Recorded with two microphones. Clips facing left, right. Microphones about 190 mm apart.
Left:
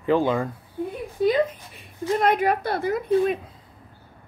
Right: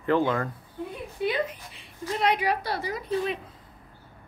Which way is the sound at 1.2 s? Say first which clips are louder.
Left 7 dB; 45° left (ahead or behind).